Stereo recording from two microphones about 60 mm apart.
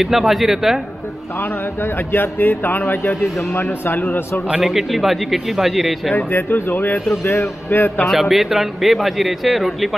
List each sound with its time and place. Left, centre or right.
0.0 s speech: centre
2.1 s a man's voice: left
4.6 s speech: centre
6.1 s a man's voice: left
8.0 s speech: centre